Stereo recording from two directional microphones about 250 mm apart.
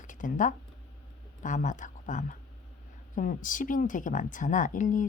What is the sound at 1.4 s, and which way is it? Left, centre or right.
Speech, left.